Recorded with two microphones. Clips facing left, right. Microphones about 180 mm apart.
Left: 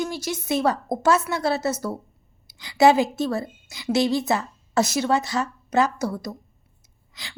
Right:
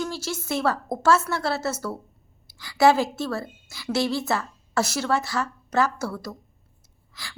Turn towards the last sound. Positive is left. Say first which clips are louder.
# even
turn(degrees=20)  # may be behind; listen again after turning